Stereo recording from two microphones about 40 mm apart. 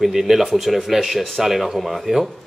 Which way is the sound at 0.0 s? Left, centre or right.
Centre.